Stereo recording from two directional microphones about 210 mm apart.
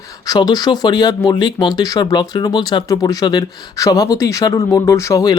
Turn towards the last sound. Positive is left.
turn(degrees=15)  # may be behind; listen again after turning